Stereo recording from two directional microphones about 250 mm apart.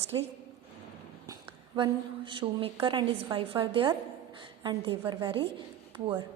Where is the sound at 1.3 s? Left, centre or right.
Centre.